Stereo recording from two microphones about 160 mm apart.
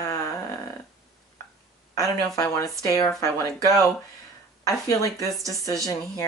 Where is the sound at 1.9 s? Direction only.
20° left (ahead or behind).